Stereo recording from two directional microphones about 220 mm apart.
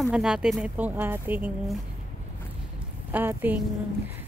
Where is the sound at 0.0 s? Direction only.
5° right (ahead or behind).